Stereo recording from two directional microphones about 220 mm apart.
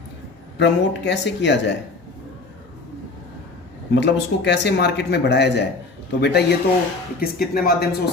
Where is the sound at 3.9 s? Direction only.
50° left (ahead or behind).